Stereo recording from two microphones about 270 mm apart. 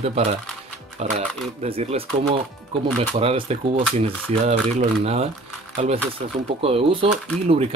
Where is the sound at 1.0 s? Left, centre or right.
Right.